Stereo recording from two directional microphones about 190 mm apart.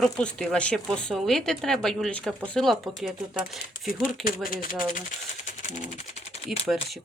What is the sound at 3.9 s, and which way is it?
Speech, 45° left (ahead or behind).